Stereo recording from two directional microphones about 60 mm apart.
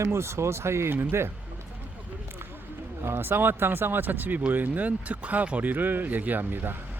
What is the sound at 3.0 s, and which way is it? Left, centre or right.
Speech, right.